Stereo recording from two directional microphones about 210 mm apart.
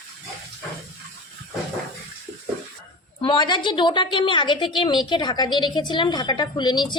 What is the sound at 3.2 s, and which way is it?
A woman's voice, 25° left (ahead or behind).